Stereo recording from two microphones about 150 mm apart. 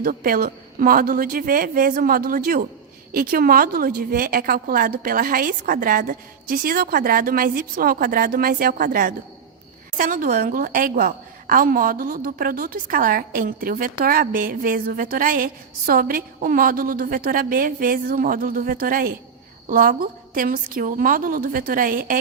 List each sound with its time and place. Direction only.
0.0 s a woman's voice: 70° right (ahead or behind)
19.6 s a woman's voice: 60° right (ahead or behind)